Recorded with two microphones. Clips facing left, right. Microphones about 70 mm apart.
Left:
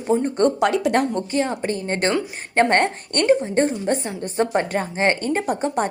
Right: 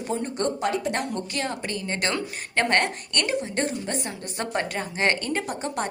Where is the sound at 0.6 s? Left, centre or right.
Left.